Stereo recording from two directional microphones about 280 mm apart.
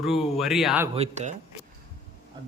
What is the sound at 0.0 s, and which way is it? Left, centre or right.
Speech, centre.